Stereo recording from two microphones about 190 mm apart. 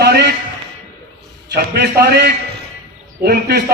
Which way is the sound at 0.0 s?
60° right (ahead or behind).